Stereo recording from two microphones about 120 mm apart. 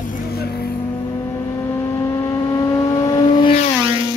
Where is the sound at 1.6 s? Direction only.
20° left (ahead or behind); by 3.5 s 35° left (ahead or behind).